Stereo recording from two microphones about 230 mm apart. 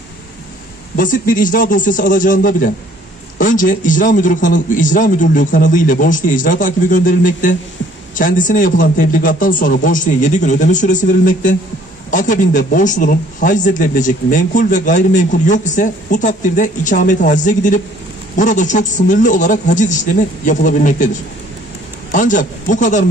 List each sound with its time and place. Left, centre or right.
0.9 s speech: left